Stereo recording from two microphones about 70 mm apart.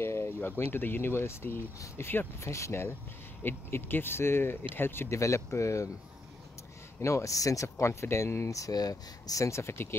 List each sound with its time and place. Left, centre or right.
0.0 s speech: left
2.4 s speech: left
3.4 s speech: left
7.0 s speech: left
7.8 s speech: left